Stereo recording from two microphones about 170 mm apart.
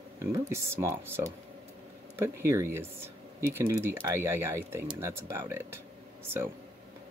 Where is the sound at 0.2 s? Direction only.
15° right (ahead or behind).